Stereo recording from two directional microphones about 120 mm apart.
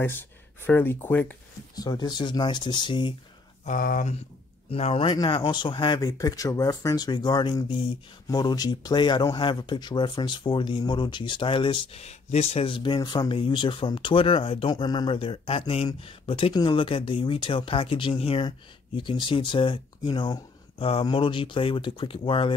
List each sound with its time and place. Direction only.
0.0 s speech: 20° left (ahead or behind)
1.8 s speech: 35° left (ahead or behind)
3.6 s speech: 85° left
4.6 s speech: 55° left (ahead or behind); by 20.3 s 40° left (ahead or behind)
20.8 s speech: 50° left (ahead or behind)